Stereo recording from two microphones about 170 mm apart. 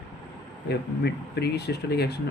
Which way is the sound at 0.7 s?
75° left (ahead or behind).